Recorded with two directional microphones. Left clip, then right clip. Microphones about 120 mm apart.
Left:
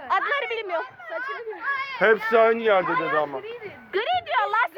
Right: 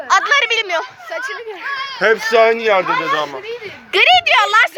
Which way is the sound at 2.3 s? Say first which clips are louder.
Right 6 dB; 35° left (ahead or behind).